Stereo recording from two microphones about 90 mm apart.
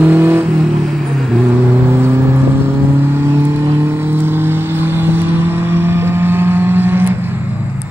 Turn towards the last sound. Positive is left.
turn(degrees=-25)  # may be behind; listen again after turning